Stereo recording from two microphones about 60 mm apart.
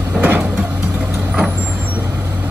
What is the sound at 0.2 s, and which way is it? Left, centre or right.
Music, right.